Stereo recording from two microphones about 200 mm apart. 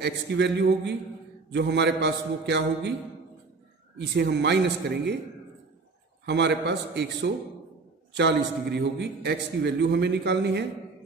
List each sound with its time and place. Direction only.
0.0 s a man's voice: 60° right (ahead or behind)
4.1 s a man's voice: 55° right (ahead or behind)
6.2 s a man's voice: 60° right (ahead or behind)